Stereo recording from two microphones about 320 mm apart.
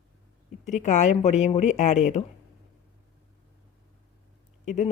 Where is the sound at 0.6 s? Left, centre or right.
Left.